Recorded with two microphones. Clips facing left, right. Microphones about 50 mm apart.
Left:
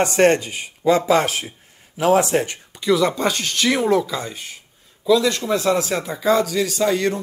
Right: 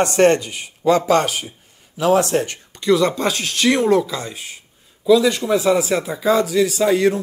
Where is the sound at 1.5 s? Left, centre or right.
Left.